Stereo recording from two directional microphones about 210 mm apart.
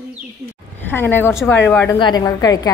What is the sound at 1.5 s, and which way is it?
A woman's voice, 10° left (ahead or behind).